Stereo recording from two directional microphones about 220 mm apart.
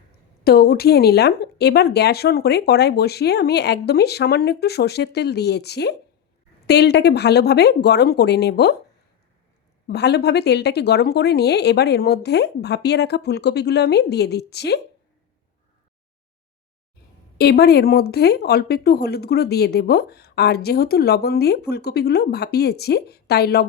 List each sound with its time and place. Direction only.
0.4 s a woman's voice: 45° left (ahead or behind)
9.8 s a woman's voice: 50° left (ahead or behind)
17.3 s a woman's voice: 45° left (ahead or behind)